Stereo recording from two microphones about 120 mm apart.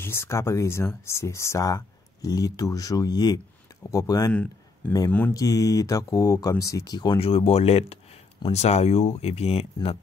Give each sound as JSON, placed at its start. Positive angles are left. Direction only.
{"t": 0.0, "sound": "speech", "side_deg": 20}
{"t": 4.3, "sound": "speech", "side_deg": 10}
{"t": 5.3, "sound": "speech", "side_deg": 30}
{"t": 7.2, "sound": "speech", "side_deg": 55}